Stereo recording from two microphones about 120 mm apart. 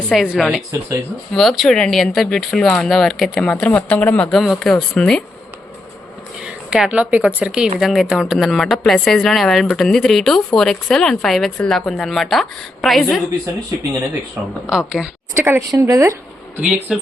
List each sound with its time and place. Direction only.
0.1 s speech: 5° right (ahead or behind); by 4.3 s 10° left (ahead or behind)
4.3 s speech: centre (ahead or behind)
6.4 s speech: 5° right (ahead or behind)
14.7 s speech: 5° right (ahead or behind)
15.4 s speech: 20° right (ahead or behind)
16.6 s speech: 10° right (ahead or behind)